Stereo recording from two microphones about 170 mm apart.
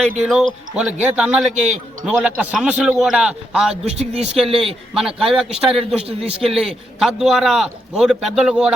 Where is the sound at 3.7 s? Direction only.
35° right (ahead or behind).